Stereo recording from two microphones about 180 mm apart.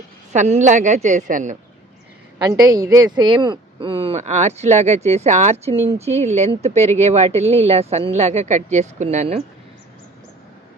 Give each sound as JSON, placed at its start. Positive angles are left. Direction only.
{"t": 0.3, "sound": "speech", "side_deg": -40}
{"t": 2.4, "sound": "speech", "side_deg": -20}